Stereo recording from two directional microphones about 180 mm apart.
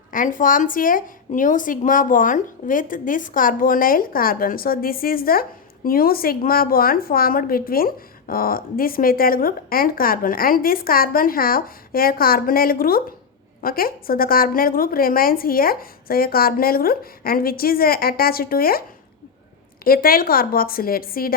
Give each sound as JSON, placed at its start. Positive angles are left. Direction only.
{"t": 0.1, "sound": "a woman's voice", "side_deg": 50}
{"t": 19.8, "sound": "a woman's voice", "side_deg": 55}